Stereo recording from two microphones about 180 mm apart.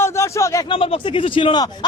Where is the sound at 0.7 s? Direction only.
30° left (ahead or behind).